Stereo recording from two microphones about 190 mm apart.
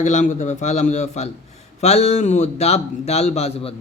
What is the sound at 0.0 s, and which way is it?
Speech, 40° left (ahead or behind).